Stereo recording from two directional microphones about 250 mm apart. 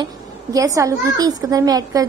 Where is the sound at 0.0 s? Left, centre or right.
Centre.